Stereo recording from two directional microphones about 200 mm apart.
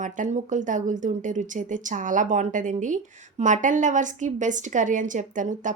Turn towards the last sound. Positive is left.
turn(degrees=-40)  # may be behind; listen again after turning